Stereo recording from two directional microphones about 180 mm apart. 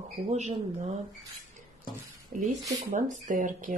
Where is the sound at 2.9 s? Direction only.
45° right (ahead or behind).